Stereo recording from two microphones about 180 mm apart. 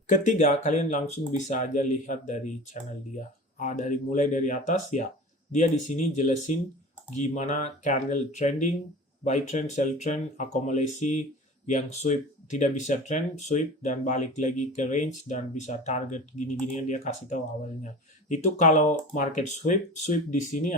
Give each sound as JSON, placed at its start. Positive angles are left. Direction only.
{"t": 0.1, "sound": "speech", "side_deg": 45}
{"t": 3.6, "sound": "speech", "side_deg": 40}